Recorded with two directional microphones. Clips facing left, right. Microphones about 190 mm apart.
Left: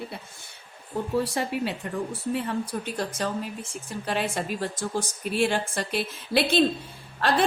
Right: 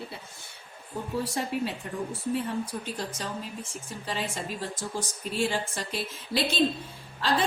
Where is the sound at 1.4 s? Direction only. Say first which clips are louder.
Left 3 dB; 70° left (ahead or behind).